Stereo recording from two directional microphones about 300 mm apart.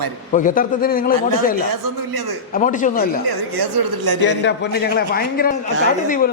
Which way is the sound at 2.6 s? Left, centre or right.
Left.